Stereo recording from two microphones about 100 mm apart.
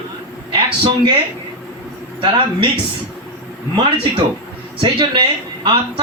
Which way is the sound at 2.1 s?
60° right (ahead or behind).